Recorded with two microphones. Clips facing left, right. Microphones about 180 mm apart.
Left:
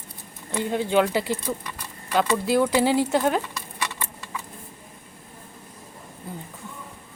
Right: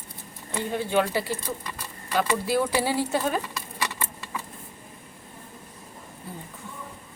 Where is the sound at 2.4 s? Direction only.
15° left (ahead or behind).